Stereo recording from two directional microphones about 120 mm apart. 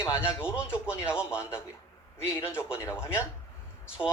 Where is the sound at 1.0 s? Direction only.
10° right (ahead or behind).